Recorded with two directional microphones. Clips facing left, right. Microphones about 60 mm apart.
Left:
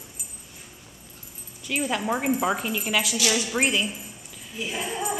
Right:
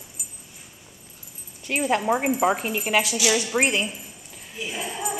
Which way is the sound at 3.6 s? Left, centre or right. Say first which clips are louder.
Left 1 dB; right.